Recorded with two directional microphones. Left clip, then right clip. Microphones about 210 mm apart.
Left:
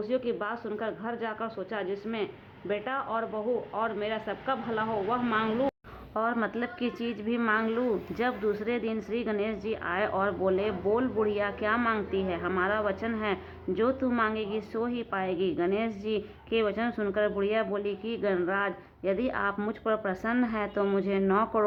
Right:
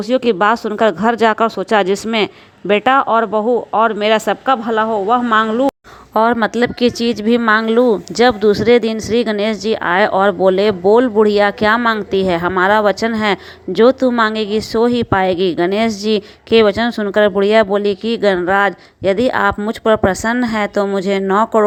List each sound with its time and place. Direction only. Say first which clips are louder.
0.0 s a woman's voice: right 17 dB; 55° right (ahead or behind)
6.1 s a woman's voice: right 16 dB; 40° right (ahead or behind)